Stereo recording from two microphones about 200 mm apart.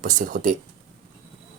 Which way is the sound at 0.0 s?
40° right (ahead or behind).